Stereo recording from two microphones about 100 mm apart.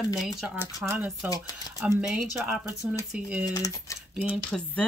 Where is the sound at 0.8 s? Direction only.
15° right (ahead or behind).